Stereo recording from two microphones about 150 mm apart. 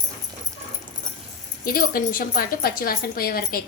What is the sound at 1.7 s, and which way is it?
A woman's voice, 75° left (ahead or behind).